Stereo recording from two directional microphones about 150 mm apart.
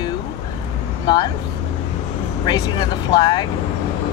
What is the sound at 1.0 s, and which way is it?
Speech, 30° left (ahead or behind).